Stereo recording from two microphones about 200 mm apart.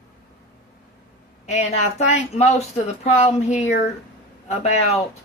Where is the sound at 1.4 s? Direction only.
35° left (ahead or behind).